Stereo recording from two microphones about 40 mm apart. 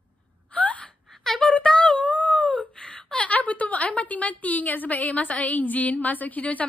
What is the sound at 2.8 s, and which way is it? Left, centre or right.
A woman's voice, left.